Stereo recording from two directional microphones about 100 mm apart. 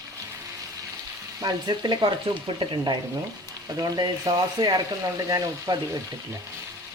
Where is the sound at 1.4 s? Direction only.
45° right (ahead or behind).